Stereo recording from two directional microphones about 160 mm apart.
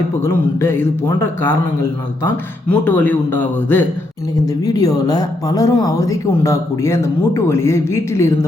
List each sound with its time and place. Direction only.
0.2 s speech: 15° left (ahead or behind)
4.4 s speech: 20° left (ahead or behind)